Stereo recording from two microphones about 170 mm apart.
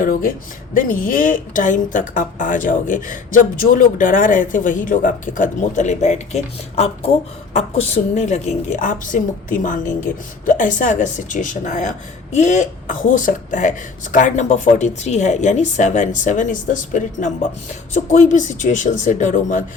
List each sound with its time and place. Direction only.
0.0 s a woman's voice: 55° left (ahead or behind)